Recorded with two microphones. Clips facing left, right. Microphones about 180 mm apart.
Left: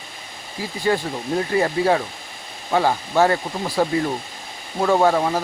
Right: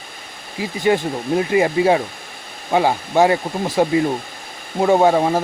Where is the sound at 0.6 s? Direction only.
20° right (ahead or behind).